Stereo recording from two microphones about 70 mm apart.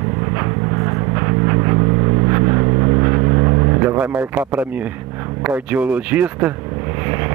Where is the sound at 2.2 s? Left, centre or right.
Right.